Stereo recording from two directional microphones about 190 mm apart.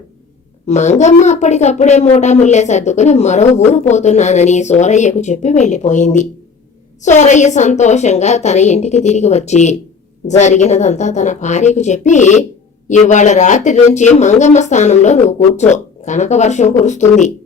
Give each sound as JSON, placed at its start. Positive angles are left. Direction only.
{"t": 0.7, "sound": "a woman's voice", "side_deg": 40}